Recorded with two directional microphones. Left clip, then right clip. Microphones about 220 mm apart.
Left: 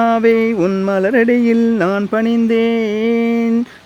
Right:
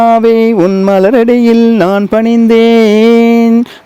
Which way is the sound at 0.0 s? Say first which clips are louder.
Right 6 dB; 35° right (ahead or behind).